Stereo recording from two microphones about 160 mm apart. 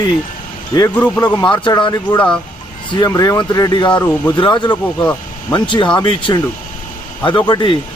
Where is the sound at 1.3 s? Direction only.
25° left (ahead or behind).